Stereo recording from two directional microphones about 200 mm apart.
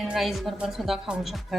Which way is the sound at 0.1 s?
Centre (ahead or behind).